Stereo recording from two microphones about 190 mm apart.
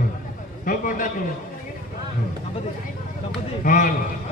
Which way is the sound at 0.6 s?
45° left (ahead or behind).